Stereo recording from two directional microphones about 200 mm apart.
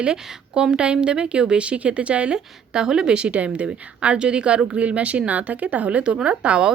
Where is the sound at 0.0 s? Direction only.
5° right (ahead or behind).